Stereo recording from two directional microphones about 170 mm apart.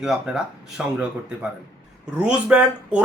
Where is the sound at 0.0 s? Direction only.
5° right (ahead or behind).